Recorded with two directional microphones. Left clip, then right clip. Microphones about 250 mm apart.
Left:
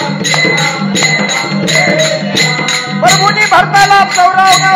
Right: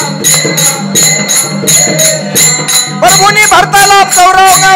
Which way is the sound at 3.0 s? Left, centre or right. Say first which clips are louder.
Right 3 dB; right.